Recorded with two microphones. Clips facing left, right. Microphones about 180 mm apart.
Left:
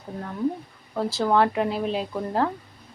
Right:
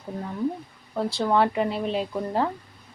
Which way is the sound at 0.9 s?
Centre (ahead or behind).